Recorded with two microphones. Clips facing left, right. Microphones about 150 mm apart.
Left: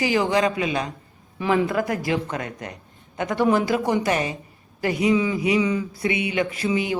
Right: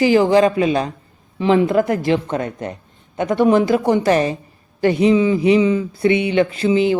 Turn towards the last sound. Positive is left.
turn(degrees=-25)  # may be behind; listen again after turning